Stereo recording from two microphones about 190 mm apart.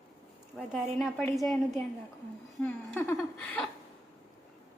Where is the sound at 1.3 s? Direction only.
Centre (ahead or behind).